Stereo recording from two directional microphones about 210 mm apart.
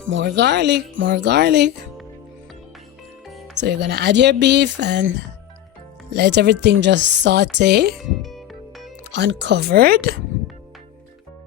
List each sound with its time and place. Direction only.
0.0 s speech: 60° right (ahead or behind)
3.2 s music: centre (ahead or behind)
3.5 s speech: 55° right (ahead or behind)
6.1 s speech: 55° right (ahead or behind)
9.1 s speech: 55° right (ahead or behind)